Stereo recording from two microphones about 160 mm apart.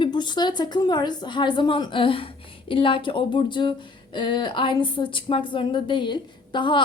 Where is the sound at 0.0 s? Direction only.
30° left (ahead or behind).